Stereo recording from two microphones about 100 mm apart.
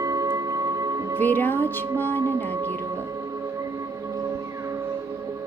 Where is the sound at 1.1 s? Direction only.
20° left (ahead or behind).